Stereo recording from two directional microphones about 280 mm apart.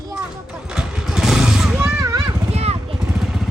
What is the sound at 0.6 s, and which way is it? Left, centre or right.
Vehicle, centre.